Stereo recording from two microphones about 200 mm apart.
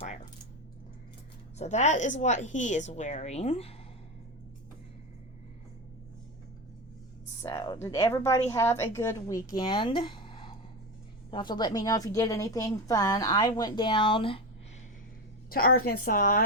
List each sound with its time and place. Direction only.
1.5 s a woman's voice: 35° left (ahead or behind)
7.4 s a woman's voice: 15° left (ahead or behind)
15.4 s a woman's voice: 45° left (ahead or behind)